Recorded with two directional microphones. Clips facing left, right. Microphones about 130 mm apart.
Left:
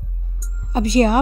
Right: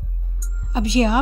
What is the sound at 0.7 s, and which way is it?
Speech, 50° left (ahead or behind).